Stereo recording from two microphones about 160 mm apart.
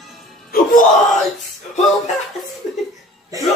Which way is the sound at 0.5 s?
60° left (ahead or behind).